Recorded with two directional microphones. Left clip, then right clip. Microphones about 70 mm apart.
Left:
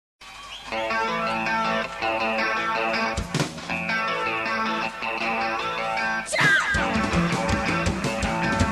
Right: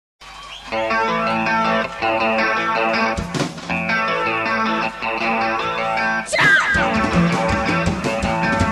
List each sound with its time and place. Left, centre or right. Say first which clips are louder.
0.7 s music: right 6 dB; left